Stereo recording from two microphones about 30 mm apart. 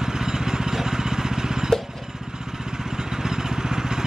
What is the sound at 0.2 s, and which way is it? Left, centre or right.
Vehicle, right.